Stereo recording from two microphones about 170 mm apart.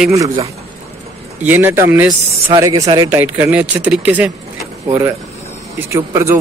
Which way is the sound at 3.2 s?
10° right (ahead or behind).